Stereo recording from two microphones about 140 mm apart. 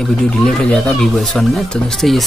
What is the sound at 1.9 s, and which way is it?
Speech, centre (ahead or behind).